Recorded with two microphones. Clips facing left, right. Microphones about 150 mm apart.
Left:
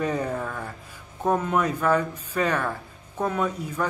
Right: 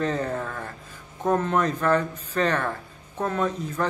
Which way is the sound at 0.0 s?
10° left (ahead or behind).